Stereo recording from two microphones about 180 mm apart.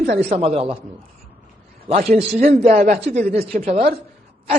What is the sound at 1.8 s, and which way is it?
A man's voice, 35° right (ahead or behind).